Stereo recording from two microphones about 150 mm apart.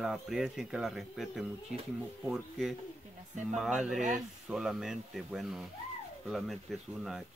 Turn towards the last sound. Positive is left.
turn(degrees=0)  # may be behind; listen again after turning